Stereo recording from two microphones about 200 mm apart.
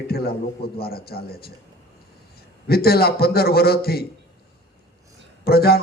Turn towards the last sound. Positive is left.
turn(degrees=50)  # may be behind; listen again after turning